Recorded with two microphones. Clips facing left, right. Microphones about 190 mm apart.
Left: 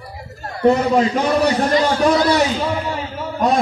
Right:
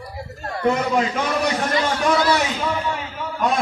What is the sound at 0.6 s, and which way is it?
A man's voice, 35° left (ahead or behind).